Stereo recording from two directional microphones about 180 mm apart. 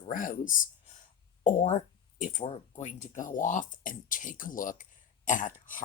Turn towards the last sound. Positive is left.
turn(degrees=50)  # may be behind; listen again after turning